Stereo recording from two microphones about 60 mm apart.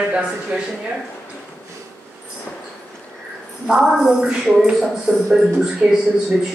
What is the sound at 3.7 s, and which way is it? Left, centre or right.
A man's voice, centre.